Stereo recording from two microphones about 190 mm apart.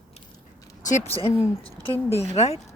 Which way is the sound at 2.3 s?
35° left (ahead or behind).